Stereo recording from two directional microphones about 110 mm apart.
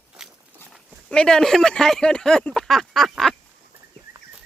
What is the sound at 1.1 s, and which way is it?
Speech, 5° left (ahead or behind).